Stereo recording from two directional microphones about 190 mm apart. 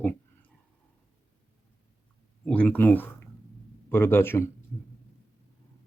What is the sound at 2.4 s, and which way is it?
Speech, 5° left (ahead or behind).